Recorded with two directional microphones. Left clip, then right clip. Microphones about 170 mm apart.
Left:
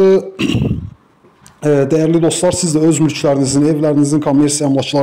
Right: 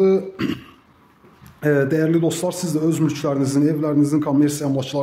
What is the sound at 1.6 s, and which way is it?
A man's voice, 20° left (ahead or behind).